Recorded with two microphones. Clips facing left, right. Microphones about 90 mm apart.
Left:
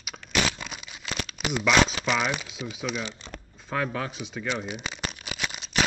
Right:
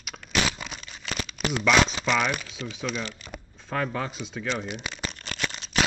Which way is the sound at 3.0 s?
25° left (ahead or behind).